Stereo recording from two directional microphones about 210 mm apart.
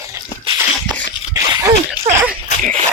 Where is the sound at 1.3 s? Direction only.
15° right (ahead or behind).